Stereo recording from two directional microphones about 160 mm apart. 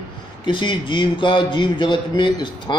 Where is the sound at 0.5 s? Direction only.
30° left (ahead or behind).